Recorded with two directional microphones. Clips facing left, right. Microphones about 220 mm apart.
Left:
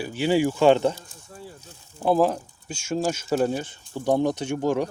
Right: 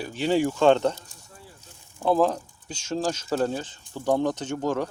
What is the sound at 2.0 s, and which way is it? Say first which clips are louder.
Speech: left 1 dB; 5° left (ahead or behind).